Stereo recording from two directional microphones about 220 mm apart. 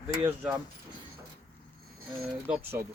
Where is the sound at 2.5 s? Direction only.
10° right (ahead or behind).